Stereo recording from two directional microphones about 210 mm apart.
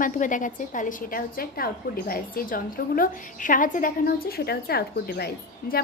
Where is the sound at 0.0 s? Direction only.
40° left (ahead or behind).